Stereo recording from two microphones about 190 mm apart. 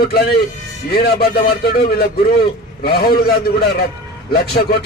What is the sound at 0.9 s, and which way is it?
A man's voice, 55° left (ahead or behind).